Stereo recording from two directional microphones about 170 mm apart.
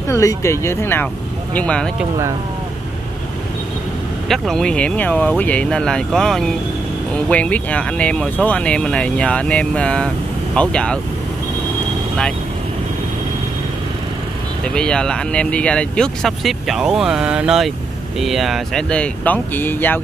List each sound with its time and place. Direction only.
0.1 s speech: 15° left (ahead or behind)
4.3 s speech: 5° left (ahead or behind)
14.6 s speech: 5° left (ahead or behind)